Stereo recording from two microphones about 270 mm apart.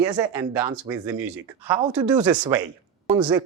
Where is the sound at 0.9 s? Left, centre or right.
Centre.